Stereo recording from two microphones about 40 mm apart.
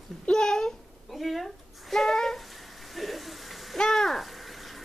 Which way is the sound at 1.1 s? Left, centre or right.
Centre.